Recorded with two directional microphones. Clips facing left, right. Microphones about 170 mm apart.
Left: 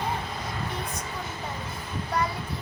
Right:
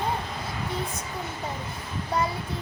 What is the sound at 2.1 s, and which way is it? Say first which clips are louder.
Child singing: right 1 dB; 25° right (ahead or behind).